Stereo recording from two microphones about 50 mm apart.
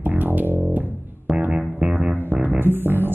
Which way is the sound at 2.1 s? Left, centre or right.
Right.